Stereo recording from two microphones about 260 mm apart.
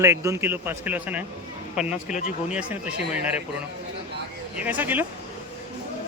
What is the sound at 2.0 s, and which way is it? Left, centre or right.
Speech, left.